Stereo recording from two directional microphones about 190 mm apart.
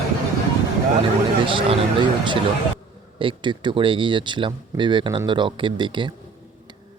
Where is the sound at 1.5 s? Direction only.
25° right (ahead or behind).